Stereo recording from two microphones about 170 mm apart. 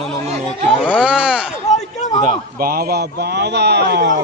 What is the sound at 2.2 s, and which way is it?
A man's voice, 60° right (ahead or behind).